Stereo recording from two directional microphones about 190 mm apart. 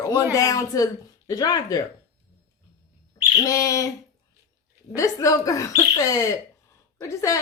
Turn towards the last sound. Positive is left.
turn(degrees=15)  # may be behind; listen again after turning